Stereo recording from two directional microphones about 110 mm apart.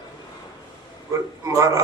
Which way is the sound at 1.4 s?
30° right (ahead or behind).